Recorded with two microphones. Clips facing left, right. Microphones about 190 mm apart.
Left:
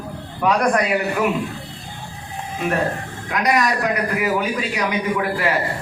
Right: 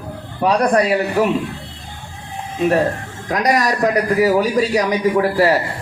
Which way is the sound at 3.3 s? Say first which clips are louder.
Right 2 dB; 40° right (ahead or behind).